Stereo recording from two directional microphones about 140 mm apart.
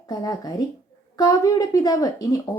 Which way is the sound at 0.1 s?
25° left (ahead or behind).